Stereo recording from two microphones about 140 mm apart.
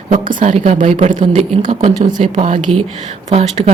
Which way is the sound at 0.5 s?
45° right (ahead or behind).